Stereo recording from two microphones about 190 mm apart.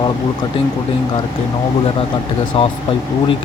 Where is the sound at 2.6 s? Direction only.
30° left (ahead or behind).